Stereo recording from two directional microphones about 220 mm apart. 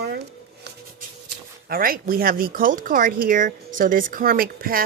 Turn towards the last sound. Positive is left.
turn(degrees=-40)  # may be behind; listen again after turning